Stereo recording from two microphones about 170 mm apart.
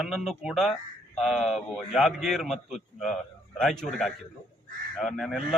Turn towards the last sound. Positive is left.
turn(degrees=0)  # may be behind; listen again after turning